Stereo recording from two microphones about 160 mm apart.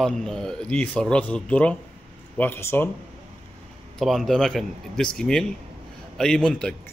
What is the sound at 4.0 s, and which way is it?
A man's voice, centre (ahead or behind).